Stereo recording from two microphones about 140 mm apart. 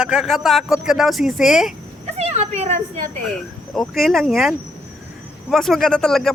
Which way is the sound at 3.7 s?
Centre (ahead or behind).